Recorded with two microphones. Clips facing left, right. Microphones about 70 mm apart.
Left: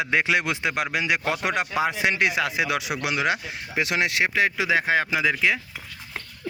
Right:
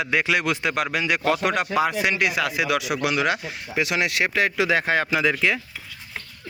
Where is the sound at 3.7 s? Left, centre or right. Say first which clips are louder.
Even; left; by 5.6 s centre.